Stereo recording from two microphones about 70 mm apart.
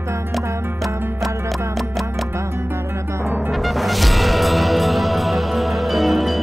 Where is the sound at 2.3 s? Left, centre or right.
Right.